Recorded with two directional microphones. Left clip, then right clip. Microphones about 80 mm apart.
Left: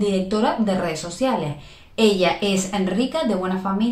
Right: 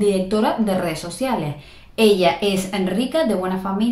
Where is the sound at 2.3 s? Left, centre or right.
Right.